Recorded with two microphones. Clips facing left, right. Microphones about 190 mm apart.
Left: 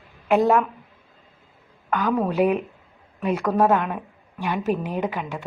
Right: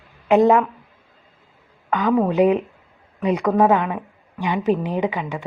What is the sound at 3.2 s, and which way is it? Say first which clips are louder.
Speech: right 3 dB; centre (ahead or behind).